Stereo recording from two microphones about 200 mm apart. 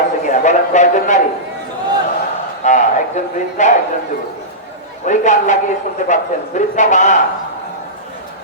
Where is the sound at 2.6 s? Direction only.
35° left (ahead or behind).